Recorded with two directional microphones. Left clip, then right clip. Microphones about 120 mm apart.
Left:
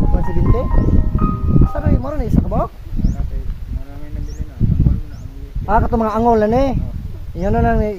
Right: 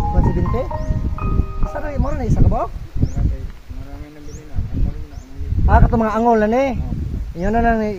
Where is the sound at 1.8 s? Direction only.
15° left (ahead or behind).